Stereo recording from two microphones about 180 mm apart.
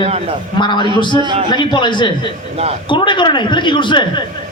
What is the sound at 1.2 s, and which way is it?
Speech, 30° right (ahead or behind).